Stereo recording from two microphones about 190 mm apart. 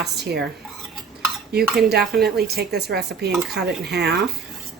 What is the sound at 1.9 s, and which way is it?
A woman's voice, 60° right (ahead or behind).